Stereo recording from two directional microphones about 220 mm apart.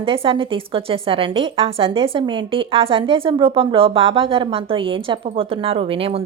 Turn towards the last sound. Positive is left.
turn(degrees=-25)  # may be behind; listen again after turning